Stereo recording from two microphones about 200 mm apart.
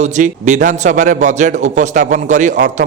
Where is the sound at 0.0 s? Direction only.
35° right (ahead or behind).